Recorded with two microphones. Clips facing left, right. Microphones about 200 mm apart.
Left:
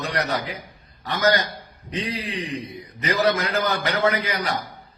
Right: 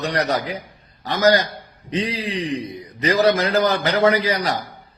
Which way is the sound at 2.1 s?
35° right (ahead or behind).